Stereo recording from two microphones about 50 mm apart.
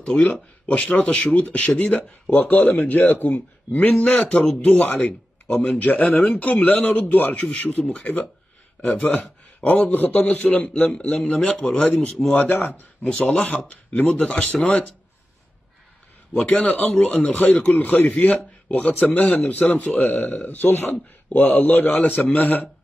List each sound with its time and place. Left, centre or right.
0.0 s speech: left
9.7 s speech: left
11.8 s speech: left
16.4 s speech: left
20.0 s speech: centre
20.3 s speech: left